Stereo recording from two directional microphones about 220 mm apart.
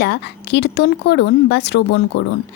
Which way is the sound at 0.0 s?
50° left (ahead or behind).